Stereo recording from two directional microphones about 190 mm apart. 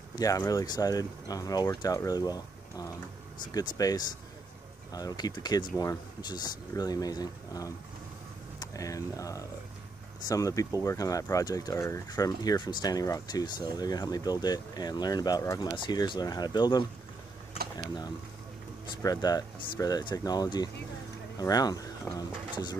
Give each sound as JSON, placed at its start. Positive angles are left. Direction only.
{"t": 0.1, "sound": "speech", "side_deg": 20}
{"t": 19.0, "sound": "speech", "side_deg": 20}